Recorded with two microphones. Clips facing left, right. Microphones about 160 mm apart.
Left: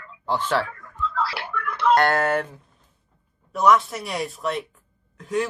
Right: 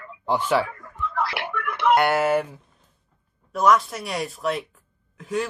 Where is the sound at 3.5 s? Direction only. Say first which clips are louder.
Left 1 dB; centre (ahead or behind).